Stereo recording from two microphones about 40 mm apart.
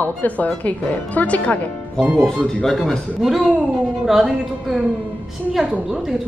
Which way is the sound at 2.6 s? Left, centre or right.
Centre.